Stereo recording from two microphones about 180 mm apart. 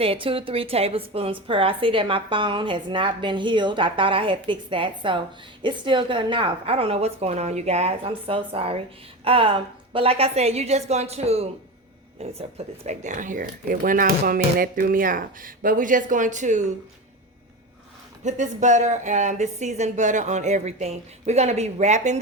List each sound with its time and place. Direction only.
0.0 s a woman's voice: 30° right (ahead or behind)
18.2 s speech: 40° right (ahead or behind)